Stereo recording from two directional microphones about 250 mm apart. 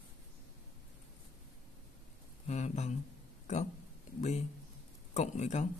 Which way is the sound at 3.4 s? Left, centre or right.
Left.